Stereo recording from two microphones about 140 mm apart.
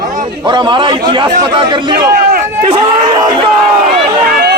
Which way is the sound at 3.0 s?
30° right (ahead or behind).